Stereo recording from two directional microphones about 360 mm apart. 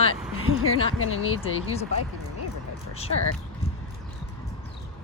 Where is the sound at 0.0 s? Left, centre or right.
Left.